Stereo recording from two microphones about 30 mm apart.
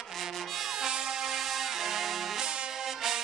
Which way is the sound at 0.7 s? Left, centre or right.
Right.